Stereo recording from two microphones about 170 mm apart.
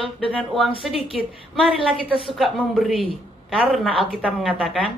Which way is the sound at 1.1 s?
Centre (ahead or behind).